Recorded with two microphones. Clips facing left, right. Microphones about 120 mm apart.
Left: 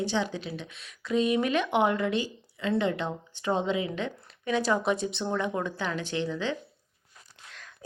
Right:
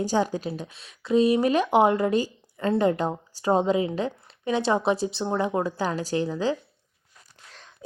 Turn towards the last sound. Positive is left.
turn(degrees=-40)  # may be behind; listen again after turning